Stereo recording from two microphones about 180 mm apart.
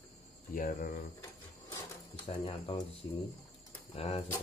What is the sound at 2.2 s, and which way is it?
Speech, 30° left (ahead or behind).